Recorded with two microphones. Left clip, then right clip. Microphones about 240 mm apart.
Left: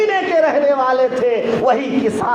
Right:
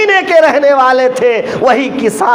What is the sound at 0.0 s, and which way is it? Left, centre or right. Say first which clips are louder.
A man's voice: right 7 dB; right.